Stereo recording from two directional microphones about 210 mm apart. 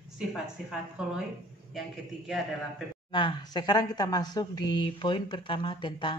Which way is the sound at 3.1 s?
20° left (ahead or behind).